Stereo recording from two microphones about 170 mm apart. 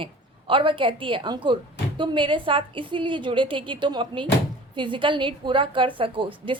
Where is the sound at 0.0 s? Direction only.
30° right (ahead or behind).